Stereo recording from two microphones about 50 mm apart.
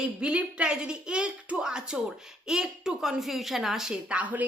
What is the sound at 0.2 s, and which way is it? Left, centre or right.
Speech, right.